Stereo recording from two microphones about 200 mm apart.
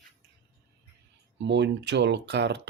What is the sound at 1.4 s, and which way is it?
Speech, 60° right (ahead or behind).